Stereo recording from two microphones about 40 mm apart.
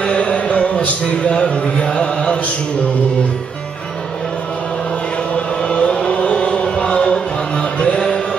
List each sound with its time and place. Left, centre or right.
0.0 s music: left
5.6 s chant: left